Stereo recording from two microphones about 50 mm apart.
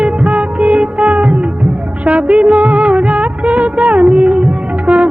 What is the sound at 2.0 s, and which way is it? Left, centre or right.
Music of bollywood, right.